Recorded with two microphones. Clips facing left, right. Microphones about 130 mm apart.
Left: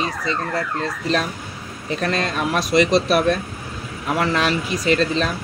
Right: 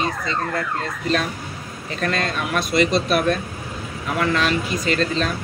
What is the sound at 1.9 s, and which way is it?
Speech, 35° left (ahead or behind).